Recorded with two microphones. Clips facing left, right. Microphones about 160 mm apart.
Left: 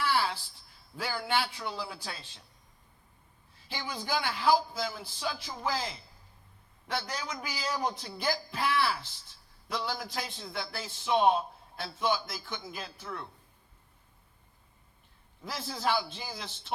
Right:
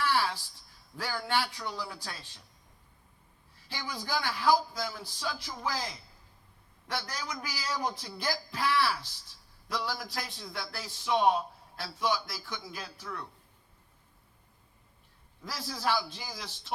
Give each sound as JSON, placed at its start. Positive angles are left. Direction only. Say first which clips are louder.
{"t": 0.0, "sound": "a sound", "louder": "even", "side_deg": 10}
{"t": 0.9, "sound": "a man's voice", "louder": "even", "side_deg": 10}
{"t": 2.1, "sound": "speech", "louder": "even", "side_deg": -15}
{"t": 3.7, "sound": "a man's voice", "louder": "left 1 dB", "side_deg": 15}
{"t": 15.4, "sound": "a man's voice", "louder": "left 1 dB", "side_deg": 20}